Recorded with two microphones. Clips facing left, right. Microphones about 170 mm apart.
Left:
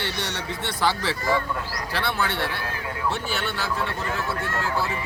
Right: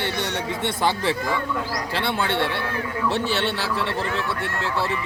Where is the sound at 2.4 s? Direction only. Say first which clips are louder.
Right 4 dB; 65° right (ahead or behind).